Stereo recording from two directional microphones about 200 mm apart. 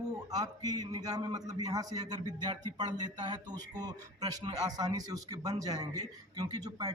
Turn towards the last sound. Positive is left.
turn(degrees=-20)  # may be behind; listen again after turning